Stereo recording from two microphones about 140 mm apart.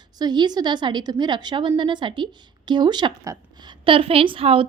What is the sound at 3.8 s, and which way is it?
Speech, 40° right (ahead or behind).